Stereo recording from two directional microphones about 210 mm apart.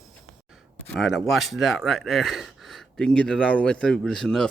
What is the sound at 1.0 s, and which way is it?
Speech, centre (ahead or behind).